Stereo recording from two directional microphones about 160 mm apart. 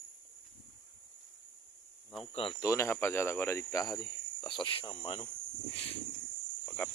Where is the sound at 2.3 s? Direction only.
35° left (ahead or behind).